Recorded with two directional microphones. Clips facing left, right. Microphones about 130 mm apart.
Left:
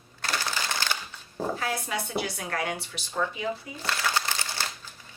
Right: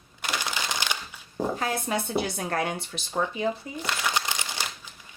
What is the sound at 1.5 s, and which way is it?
Speech, 30° right (ahead or behind).